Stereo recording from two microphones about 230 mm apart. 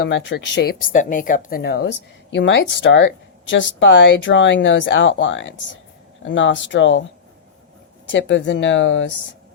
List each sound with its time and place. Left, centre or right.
0.0 s speech: left
8.1 s speech: left